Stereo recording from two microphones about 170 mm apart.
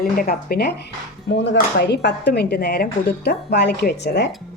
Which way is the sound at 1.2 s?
90° left.